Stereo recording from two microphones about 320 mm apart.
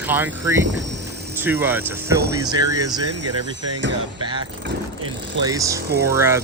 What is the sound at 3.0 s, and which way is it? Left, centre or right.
Speech, right.